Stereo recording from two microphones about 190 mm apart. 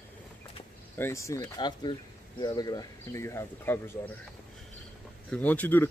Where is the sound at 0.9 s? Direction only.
15° left (ahead or behind).